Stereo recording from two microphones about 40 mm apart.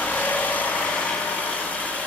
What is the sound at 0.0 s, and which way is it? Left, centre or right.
Vehicle, left.